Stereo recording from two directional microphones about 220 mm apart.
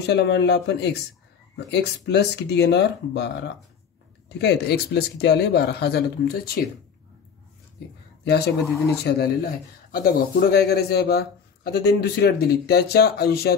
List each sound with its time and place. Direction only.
0.0 s a man's voice: 50° left (ahead or behind)
9.0 s a man's voice: 45° left (ahead or behind)